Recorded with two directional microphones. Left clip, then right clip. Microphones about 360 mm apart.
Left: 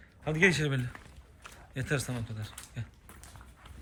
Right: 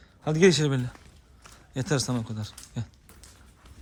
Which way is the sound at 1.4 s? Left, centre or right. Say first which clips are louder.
Right 5 dB; centre.